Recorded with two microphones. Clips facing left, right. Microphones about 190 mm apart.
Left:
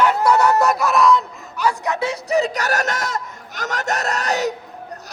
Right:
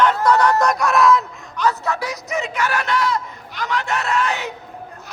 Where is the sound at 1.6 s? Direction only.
15° left (ahead or behind); by 4.5 s 40° left (ahead or behind).